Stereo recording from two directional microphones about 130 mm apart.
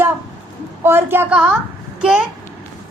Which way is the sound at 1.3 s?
5° right (ahead or behind).